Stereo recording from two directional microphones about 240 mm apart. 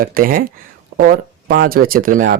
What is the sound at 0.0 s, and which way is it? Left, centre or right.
Speech, right.